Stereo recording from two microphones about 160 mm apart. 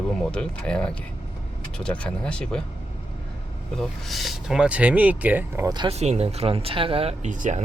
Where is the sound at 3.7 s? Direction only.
Centre (ahead or behind).